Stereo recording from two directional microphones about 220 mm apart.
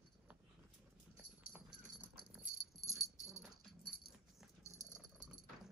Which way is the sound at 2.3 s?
Centre (ahead or behind).